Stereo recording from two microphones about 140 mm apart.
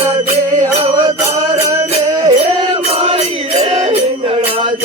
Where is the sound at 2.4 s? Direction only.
45° right (ahead or behind).